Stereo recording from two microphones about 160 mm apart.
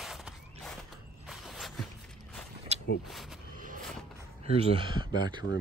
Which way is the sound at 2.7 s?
45° right (ahead or behind).